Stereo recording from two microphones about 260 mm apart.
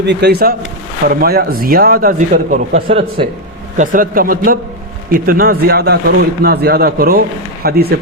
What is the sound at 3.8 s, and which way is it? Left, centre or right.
A man's voice, right.